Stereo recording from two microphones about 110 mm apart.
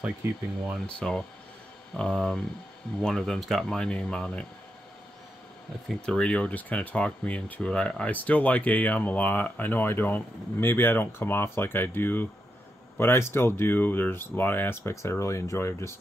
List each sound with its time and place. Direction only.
0.2 s speech: 20° right (ahead or behind)
0.8 s speech: 5° left (ahead or behind)
6.0 s speech: 10° left (ahead or behind); by 15.9 s 25° left (ahead or behind)